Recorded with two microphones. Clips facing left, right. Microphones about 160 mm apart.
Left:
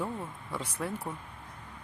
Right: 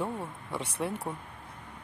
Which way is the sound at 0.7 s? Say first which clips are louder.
Right 3 dB; 30° right (ahead or behind).